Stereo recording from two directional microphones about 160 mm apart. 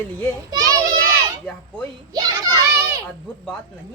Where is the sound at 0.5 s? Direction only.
20° right (ahead or behind).